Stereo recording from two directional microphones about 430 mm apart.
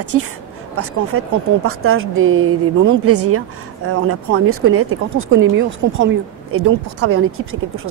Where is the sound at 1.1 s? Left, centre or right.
Right.